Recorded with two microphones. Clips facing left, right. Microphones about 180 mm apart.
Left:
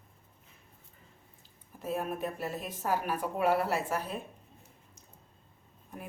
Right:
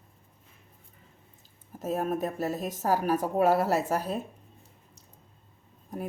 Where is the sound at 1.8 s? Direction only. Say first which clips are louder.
Right 5 dB; 40° right (ahead or behind).